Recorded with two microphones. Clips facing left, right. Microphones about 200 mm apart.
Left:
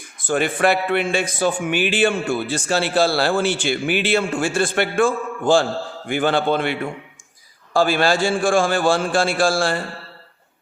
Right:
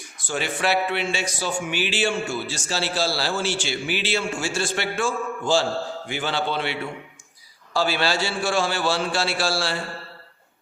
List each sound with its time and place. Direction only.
0.0 s a man's voice: 55° left (ahead or behind)